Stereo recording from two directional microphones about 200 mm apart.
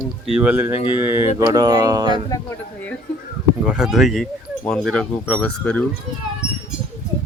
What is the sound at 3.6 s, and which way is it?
Speech, 5° right (ahead or behind).